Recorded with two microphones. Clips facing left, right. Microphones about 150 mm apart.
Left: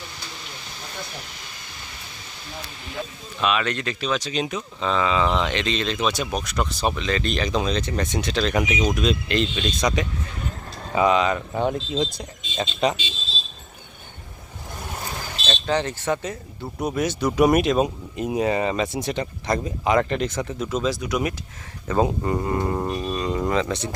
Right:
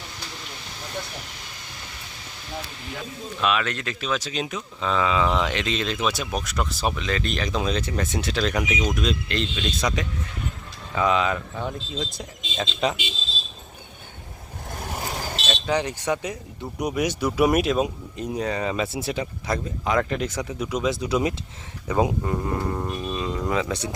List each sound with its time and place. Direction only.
3.4 s speech: centre (ahead or behind)
15.4 s speech: 10° right (ahead or behind)
20.9 s speech: 25° right (ahead or behind)
21.8 s speech: 10° right (ahead or behind)
22.2 s speech: 5° left (ahead or behind)